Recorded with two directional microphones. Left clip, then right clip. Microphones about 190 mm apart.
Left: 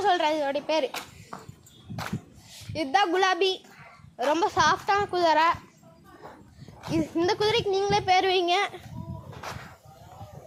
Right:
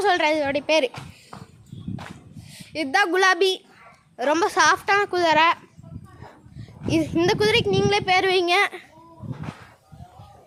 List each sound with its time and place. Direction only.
0.0 s a woman's voice: 55° right (ahead or behind)
2.7 s a woman's voice: 40° right (ahead or behind); by 5.5 s 60° right (ahead or behind)
6.9 s speech: 60° right (ahead or behind)